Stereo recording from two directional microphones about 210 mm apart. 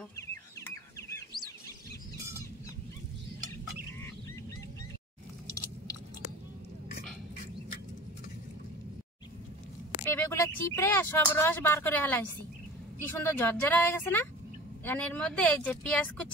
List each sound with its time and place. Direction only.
0.3 s bird: 15° left (ahead or behind)
10.0 s speech: 10° left (ahead or behind)
13.2 s speech: 10° left (ahead or behind)